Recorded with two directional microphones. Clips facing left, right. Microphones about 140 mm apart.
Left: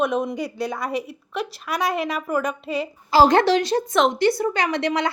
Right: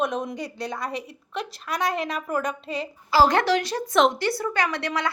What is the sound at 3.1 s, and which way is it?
A woman's voice, 20° left (ahead or behind).